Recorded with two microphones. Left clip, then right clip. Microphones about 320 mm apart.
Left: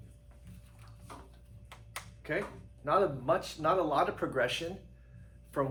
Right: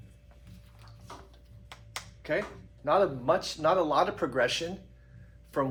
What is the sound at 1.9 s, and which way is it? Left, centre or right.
Music, right.